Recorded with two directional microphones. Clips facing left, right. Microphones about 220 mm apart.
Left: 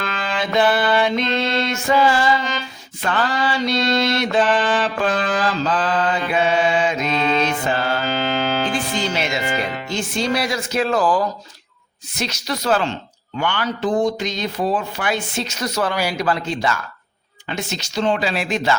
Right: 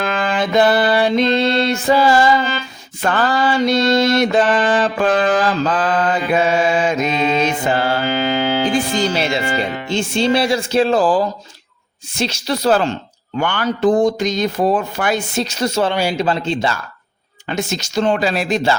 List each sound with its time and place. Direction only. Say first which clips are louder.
0.0 s music: right 6 dB; 50° right (ahead or behind)
3.0 s mantra: right 4 dB; 45° right (ahead or behind)
7.1 s music: right 2 dB; 15° right (ahead or behind)
7.7 s mantra: right 4 dB; 30° right (ahead or behind)
8.0 s music: right 4 dB; 15° right (ahead or behind)
8.7 s speech: right 5 dB; 40° right (ahead or behind)
13.4 s speech: right 5 dB; 50° right (ahead or behind); by 16.8 s 30° right (ahead or behind)
17.5 s mantra: right 5 dB; 45° right (ahead or behind)